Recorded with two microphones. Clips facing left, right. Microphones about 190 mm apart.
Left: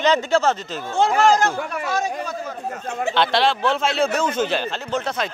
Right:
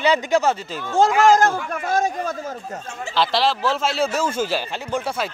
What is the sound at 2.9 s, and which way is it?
Speech, 60° left (ahead or behind).